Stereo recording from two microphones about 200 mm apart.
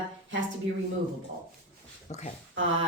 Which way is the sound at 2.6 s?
70° right (ahead or behind).